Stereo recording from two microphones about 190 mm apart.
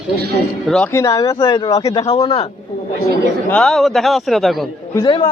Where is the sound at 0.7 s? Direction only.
5° left (ahead or behind).